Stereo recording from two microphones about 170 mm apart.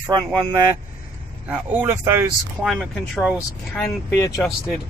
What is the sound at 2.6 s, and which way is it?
Speech, centre (ahead or behind).